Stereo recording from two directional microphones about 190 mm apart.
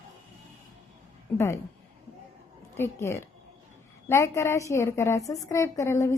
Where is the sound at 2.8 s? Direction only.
15° left (ahead or behind).